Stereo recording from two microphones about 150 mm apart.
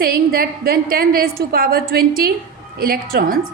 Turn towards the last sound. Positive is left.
turn(degrees=-75)  # may be behind; listen again after turning